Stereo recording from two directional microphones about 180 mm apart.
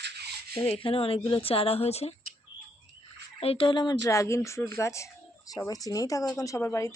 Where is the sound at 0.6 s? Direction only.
30° left (ahead or behind).